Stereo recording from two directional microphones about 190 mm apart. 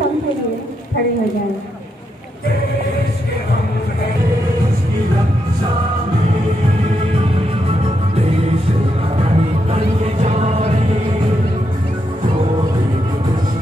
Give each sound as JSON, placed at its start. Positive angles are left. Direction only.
{"t": 9.1, "sound": "music", "side_deg": -30}